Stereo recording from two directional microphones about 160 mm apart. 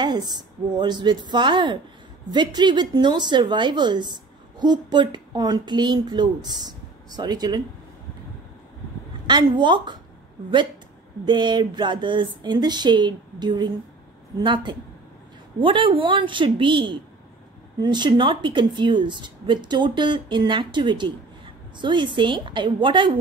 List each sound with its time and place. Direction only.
0.0 s a woman's voice: 25° right (ahead or behind)
9.3 s a woman's voice: 30° right (ahead or behind)
11.2 s a woman's voice: 30° right (ahead or behind)